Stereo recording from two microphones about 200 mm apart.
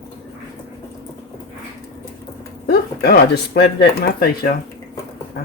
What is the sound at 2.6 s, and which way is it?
Speech, 50° left (ahead or behind).